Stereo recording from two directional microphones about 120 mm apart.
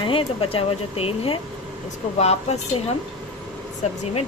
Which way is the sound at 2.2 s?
65° left (ahead or behind).